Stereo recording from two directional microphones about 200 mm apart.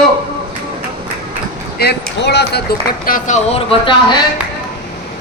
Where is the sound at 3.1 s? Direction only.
40° left (ahead or behind).